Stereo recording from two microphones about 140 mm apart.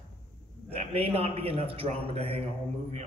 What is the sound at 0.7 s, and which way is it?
A man's voice, 45° right (ahead or behind).